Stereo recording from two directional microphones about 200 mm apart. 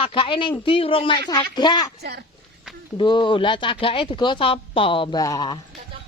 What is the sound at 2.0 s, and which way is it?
Speech, 55° right (ahead or behind).